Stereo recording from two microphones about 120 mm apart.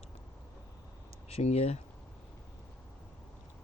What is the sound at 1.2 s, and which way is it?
Speech, 60° left (ahead or behind).